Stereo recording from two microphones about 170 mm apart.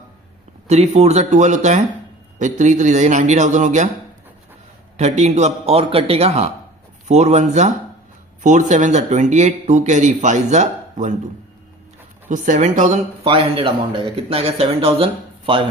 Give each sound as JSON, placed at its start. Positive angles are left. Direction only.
{"t": 0.7, "sound": "a man's voice", "side_deg": -40}
{"t": 4.9, "sound": "a man's voice", "side_deg": -40}
{"t": 12.3, "sound": "speech", "side_deg": -45}
{"t": 13.2, "sound": "a man's voice", "side_deg": -30}